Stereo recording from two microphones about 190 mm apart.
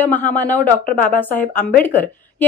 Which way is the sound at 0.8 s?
50° left (ahead or behind).